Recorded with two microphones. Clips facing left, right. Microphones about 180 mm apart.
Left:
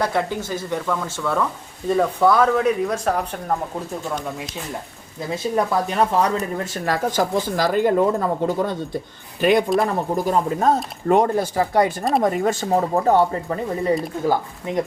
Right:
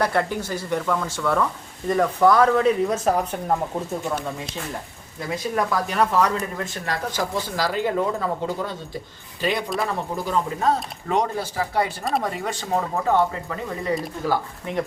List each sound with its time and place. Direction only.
0.1 s speech: 15° left (ahead or behind)
0.7 s speech: 5° left (ahead or behind)
2.8 s speech: 5° right (ahead or behind)
5.3 s speech: 25° left (ahead or behind)
6.8 s speech: 45° left (ahead or behind)